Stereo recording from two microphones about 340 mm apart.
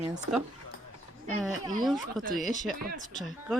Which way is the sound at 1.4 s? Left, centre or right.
Centre.